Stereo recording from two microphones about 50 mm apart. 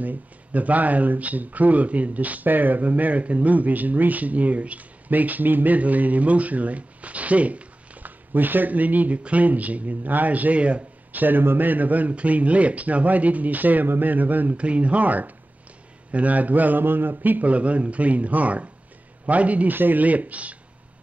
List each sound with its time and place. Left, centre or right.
0.0 s speech: right
11.1 s speech: right
14.6 s speech: right
19.7 s speech: right